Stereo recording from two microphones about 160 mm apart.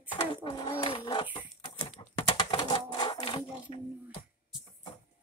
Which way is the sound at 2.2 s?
35° left (ahead or behind).